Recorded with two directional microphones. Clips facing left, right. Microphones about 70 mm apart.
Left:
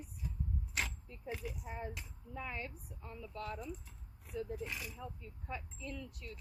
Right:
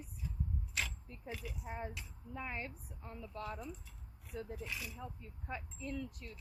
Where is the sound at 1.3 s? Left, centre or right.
Centre.